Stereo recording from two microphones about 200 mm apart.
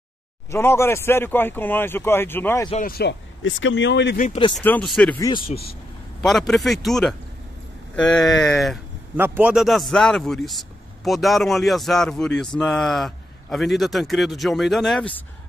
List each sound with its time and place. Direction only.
0.5 s speech: 10° left (ahead or behind)
2.8 s speech: 50° left (ahead or behind)
3.4 s speech: 70° left (ahead or behind)
4.2 s speech: 30° left (ahead or behind)
4.6 s a man's voice: 5° left (ahead or behind)
5.2 s speech: 25° left (ahead or behind)
6.2 s a man's voice: centre (ahead or behind)